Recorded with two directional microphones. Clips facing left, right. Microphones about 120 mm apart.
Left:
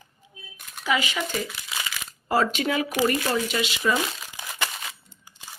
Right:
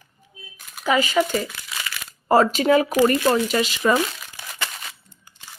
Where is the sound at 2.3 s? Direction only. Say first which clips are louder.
Right 7 dB; 40° right (ahead or behind).